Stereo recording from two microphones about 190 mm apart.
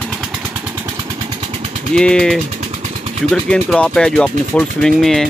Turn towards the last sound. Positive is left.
turn(degrees=0)  # may be behind; listen again after turning